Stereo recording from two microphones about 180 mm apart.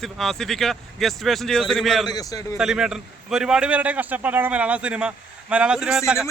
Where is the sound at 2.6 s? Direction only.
5° right (ahead or behind).